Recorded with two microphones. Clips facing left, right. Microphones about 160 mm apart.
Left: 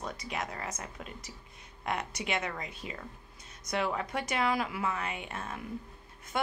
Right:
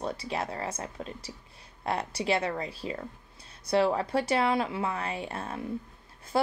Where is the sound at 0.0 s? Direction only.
30° right (ahead or behind).